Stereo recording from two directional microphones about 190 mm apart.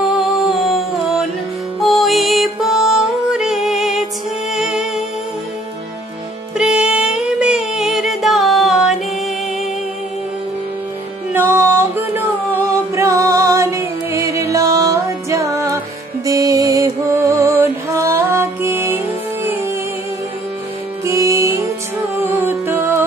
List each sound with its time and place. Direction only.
0.2 s music: centre (ahead or behind)
6.6 s music: 5° right (ahead or behind)
11.3 s music: 10° right (ahead or behind)
21.0 s music: 15° right (ahead or behind)